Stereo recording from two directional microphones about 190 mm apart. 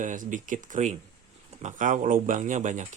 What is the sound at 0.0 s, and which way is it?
Speech, 40° right (ahead or behind).